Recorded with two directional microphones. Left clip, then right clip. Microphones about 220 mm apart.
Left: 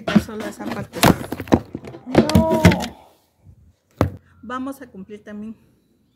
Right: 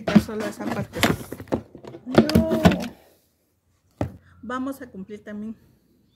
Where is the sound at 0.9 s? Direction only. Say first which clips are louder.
Left 7 dB; 30° left (ahead or behind).